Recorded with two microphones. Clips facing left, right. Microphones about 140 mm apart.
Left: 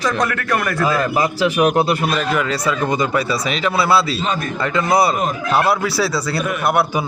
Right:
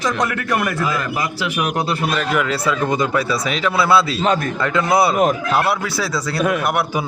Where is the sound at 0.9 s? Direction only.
35° left (ahead or behind).